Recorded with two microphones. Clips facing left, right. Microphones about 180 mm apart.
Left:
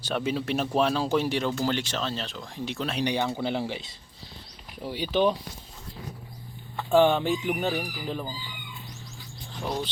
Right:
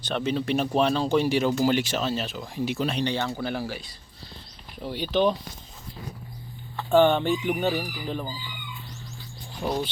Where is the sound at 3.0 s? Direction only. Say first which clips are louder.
Left 1 dB; 15° left (ahead or behind).